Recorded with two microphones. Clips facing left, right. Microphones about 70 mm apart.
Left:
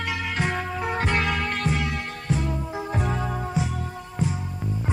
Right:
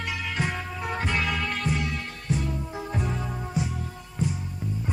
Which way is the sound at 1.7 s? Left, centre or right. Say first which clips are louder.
Left 2 dB; left.